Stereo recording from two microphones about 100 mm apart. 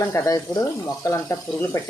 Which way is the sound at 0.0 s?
30° left (ahead or behind).